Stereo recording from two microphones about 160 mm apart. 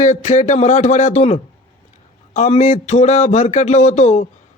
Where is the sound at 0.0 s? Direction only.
45° left (ahead or behind).